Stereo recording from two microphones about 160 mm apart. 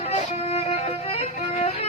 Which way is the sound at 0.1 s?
40° left (ahead or behind).